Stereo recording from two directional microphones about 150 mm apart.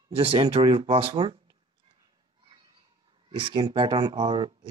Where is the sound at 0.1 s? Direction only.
40° right (ahead or behind).